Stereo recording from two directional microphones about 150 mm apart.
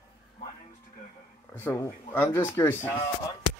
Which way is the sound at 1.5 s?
15° left (ahead or behind).